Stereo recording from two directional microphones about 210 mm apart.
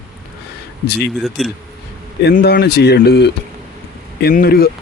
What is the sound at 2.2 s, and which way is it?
Speech, 50° left (ahead or behind).